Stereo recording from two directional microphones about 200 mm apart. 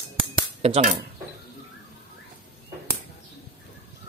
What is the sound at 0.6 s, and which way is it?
Speech, 30° right (ahead or behind).